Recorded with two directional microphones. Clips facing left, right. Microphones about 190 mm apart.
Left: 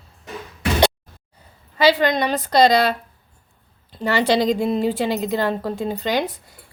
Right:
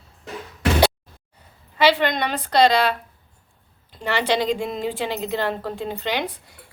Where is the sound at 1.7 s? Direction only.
40° left (ahead or behind).